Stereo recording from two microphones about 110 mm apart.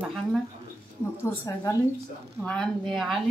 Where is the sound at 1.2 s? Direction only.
25° left (ahead or behind).